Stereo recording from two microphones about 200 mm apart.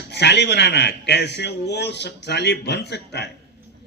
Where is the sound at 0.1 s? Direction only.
55° left (ahead or behind).